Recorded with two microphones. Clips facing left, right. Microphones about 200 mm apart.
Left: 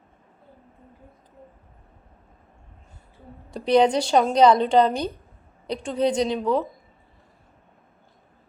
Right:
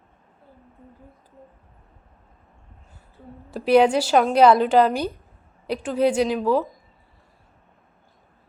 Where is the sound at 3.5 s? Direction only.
5° right (ahead or behind).